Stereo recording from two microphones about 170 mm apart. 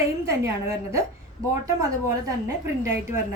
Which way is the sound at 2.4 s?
15° right (ahead or behind).